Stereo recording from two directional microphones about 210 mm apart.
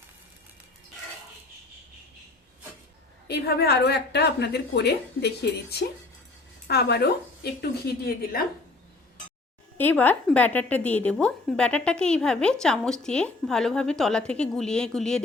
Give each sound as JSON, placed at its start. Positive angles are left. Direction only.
{"t": 3.2, "sound": "a woman's voice", "side_deg": 50}
{"t": 9.7, "sound": "a woman's voice", "side_deg": 10}